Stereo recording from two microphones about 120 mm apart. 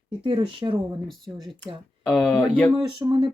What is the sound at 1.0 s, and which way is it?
Speech, centre (ahead or behind).